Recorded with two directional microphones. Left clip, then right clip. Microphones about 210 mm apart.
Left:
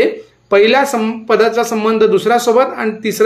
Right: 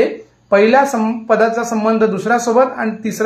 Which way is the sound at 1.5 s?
35° left (ahead or behind).